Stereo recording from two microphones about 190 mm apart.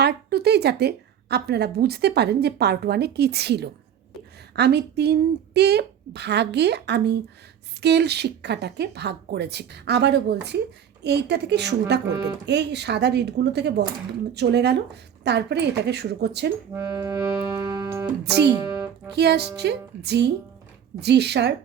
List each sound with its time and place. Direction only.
0.0 s a woman's voice: 55° right (ahead or behind)
16.7 s music: 15° right (ahead or behind)
18.3 s a woman's voice: 60° right (ahead or behind)